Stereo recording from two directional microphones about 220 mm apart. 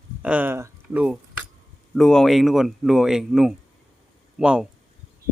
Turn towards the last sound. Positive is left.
turn(degrees=-5)  # may be behind; listen again after turning